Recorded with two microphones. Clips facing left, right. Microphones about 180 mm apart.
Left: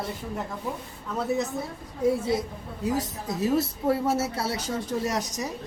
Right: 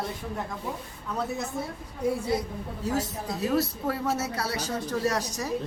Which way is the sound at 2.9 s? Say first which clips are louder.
Right 1 dB; 25° left (ahead or behind).